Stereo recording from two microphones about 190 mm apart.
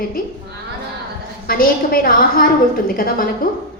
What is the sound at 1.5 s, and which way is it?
A woman's voice, 50° left (ahead or behind).